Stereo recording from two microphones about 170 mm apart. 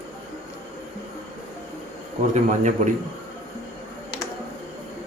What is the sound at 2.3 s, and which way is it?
Speech, 45° right (ahead or behind).